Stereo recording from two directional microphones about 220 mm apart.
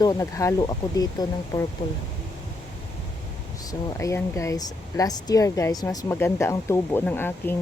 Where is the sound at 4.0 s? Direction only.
15° left (ahead or behind).